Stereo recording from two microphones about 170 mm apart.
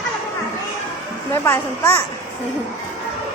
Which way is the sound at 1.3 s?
15° left (ahead or behind).